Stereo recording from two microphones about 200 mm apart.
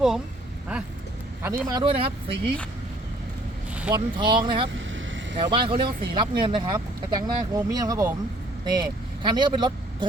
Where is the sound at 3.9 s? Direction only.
25° right (ahead or behind).